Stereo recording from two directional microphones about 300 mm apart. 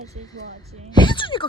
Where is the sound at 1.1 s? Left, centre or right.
Centre.